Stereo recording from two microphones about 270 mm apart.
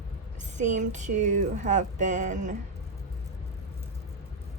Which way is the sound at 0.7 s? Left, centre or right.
Right.